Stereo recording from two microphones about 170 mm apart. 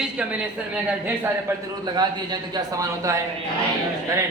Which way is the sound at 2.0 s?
25° right (ahead or behind).